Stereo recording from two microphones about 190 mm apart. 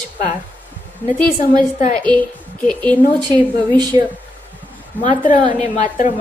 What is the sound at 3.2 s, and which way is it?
Speech, 20° right (ahead or behind).